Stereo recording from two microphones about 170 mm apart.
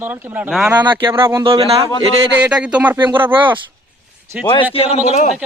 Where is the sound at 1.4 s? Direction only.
35° right (ahead or behind).